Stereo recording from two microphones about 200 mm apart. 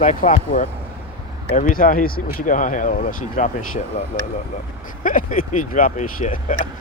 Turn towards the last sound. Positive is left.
turn(degrees=40)  # may be behind; listen again after turning